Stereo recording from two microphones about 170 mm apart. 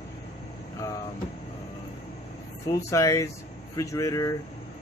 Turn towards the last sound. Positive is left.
turn(degrees=20)  # may be behind; listen again after turning